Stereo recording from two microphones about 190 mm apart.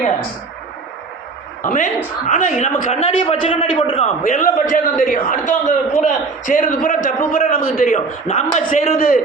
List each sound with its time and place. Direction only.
1.6 s a man's voice: 40° left (ahead or behind)
4.2 s a man's voice: 45° left (ahead or behind)